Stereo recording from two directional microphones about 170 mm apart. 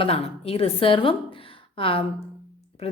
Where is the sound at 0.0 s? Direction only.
35° left (ahead or behind).